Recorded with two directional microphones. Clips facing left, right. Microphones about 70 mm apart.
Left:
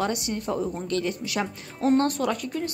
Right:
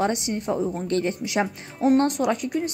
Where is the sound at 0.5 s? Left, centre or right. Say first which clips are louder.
Right 2 dB; centre.